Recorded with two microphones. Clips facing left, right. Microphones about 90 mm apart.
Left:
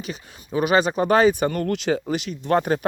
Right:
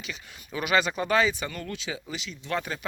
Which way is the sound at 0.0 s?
40° left (ahead or behind).